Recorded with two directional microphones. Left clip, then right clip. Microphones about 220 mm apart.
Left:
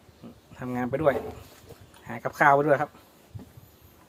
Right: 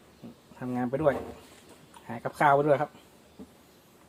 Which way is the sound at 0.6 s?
15° left (ahead or behind).